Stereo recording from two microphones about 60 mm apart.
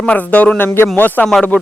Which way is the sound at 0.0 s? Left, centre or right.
Left.